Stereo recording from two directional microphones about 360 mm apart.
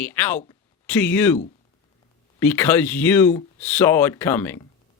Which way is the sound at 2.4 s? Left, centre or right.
Centre.